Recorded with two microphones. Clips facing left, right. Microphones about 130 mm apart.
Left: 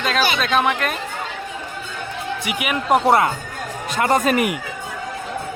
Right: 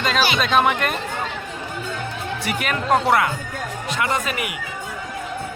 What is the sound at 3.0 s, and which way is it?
Speech, 30° left (ahead or behind).